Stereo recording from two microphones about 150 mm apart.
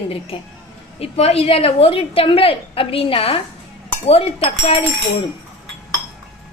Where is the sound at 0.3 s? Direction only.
40° left (ahead or behind).